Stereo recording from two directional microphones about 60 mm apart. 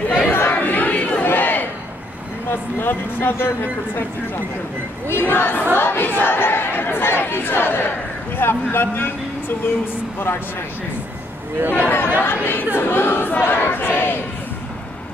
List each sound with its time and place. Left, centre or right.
0.3 s crowd: left
2.5 s speech: left
5.0 s speech: left
11.7 s speech: left
12.7 s crowd: left